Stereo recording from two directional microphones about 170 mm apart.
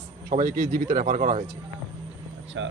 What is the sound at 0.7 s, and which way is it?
Speech, 55° right (ahead or behind).